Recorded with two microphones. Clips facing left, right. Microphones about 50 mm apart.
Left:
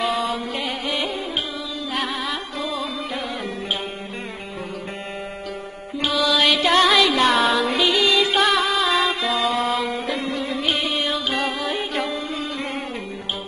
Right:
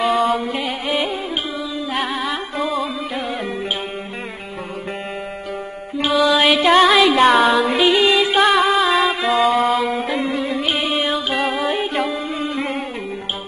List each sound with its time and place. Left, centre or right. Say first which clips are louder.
0.0 s music: right 6 dB; centre
2.0 s music: right 3 dB; centre
6.1 s music: right 5 dB; right
6.4 s music: right 3 dB; centre
7.8 s music: right 5 dB; right
8.2 s music: right 4 dB; centre